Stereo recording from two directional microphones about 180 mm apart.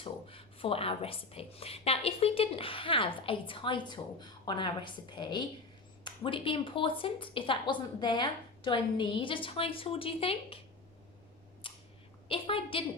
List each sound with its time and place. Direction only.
0.0 s a woman's voice: 30° left (ahead or behind)
11.6 s a sound: 30° left (ahead or behind)
12.3 s a woman's voice: 30° left (ahead or behind)